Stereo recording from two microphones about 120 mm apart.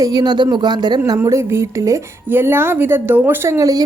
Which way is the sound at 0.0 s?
35° right (ahead or behind).